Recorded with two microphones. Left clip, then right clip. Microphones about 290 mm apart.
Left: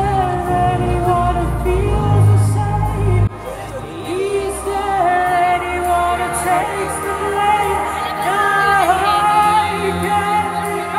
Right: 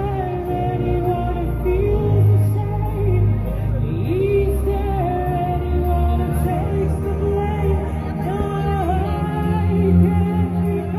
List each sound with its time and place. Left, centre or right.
8.6 s music: left